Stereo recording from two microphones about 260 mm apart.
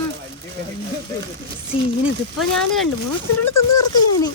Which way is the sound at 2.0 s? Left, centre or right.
Centre.